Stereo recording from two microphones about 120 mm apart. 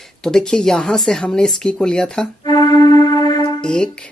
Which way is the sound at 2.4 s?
35° left (ahead or behind).